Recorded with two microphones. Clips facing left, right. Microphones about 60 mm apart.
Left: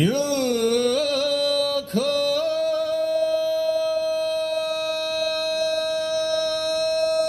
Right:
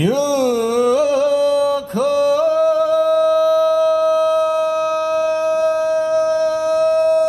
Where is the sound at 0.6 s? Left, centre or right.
Centre.